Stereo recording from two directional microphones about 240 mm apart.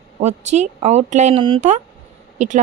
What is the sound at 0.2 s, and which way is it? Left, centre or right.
A woman's voice, right.